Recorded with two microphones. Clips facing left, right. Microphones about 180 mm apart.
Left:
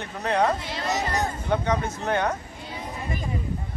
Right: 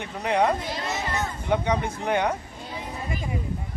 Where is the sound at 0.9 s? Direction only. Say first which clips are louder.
Left 5 dB; 35° left (ahead or behind).